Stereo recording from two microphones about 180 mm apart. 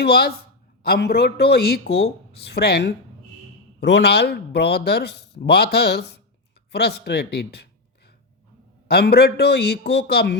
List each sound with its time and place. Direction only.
0.0 s speech: 60° left (ahead or behind)
3.8 s speech: 75° left (ahead or behind)
8.9 s speech: 60° left (ahead or behind)